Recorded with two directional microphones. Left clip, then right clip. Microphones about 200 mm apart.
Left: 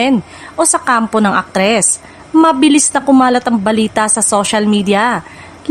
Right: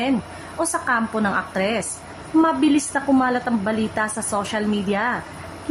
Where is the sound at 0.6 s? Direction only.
50° left (ahead or behind).